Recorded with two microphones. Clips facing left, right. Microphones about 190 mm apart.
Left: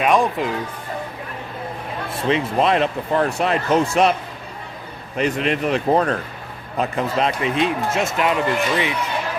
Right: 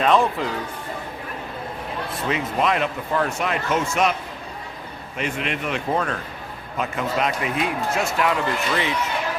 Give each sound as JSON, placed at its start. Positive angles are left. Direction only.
{"t": 0.0, "sound": "speech", "side_deg": 15}
{"t": 2.3, "sound": "speech", "side_deg": 30}
{"t": 5.1, "sound": "speech", "side_deg": 35}